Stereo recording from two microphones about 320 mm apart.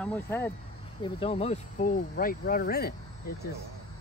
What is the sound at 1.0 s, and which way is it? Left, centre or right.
Speech, centre.